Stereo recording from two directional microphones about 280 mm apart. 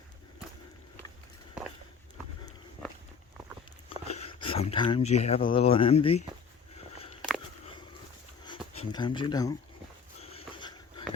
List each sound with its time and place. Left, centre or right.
4.1 s speech: left
7.2 s walk: centre
8.4 s speech: centre
10.2 s a sound: left